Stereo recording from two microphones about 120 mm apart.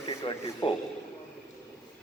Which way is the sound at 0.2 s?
50° left (ahead or behind).